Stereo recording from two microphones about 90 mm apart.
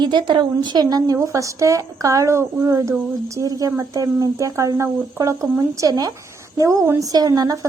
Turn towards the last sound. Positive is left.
turn(degrees=-45)  # may be behind; listen again after turning